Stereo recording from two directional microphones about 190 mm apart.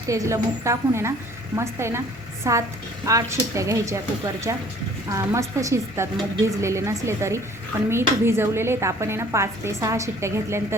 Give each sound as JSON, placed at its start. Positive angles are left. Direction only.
{"t": 0.1, "sound": "a woman's voice", "side_deg": -15}